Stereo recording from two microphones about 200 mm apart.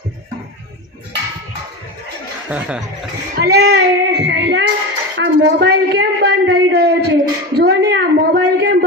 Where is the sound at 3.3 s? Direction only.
55° right (ahead or behind).